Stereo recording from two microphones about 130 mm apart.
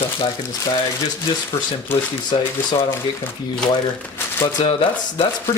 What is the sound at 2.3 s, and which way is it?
Speech, 45° left (ahead or behind).